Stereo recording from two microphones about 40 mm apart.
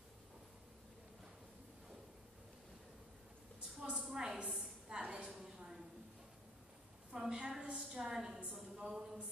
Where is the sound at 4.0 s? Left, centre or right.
Centre.